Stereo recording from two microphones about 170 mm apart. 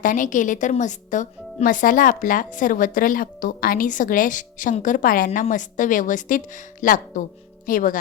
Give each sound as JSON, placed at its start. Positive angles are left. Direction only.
{"t": 0.0, "sound": "speech", "side_deg": 50}